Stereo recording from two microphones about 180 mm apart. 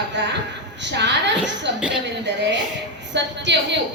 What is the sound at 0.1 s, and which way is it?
A woman's voice, 75° right (ahead or behind).